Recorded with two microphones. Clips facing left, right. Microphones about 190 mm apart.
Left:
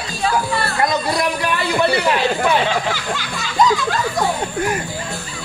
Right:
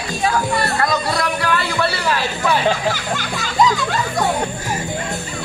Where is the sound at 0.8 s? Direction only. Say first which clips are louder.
Left 1 dB; 20° left (ahead or behind).